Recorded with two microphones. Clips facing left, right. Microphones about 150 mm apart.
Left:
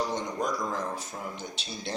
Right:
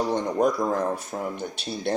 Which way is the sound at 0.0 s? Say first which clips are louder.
Right 8 dB; 60° right (ahead or behind).